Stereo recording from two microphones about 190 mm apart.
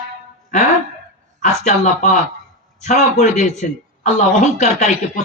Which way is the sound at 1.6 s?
35° left (ahead or behind).